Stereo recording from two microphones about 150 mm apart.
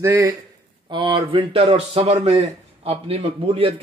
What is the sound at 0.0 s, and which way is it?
Speech, 20° right (ahead or behind).